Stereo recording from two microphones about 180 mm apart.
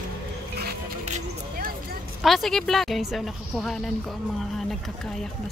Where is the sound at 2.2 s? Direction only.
Centre (ahead or behind).